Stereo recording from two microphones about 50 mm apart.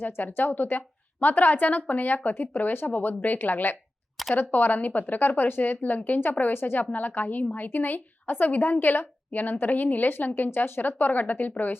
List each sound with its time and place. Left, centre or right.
0.0 s a woman's voice: left
2.3 s speech: left
2.6 s a woman's voice: left